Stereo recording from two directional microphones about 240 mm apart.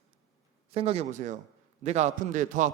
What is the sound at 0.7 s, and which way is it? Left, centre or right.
Speech, right.